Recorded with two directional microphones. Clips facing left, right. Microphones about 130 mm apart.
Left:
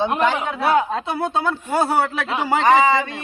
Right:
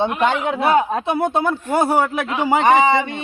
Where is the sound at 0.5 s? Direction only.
20° right (ahead or behind).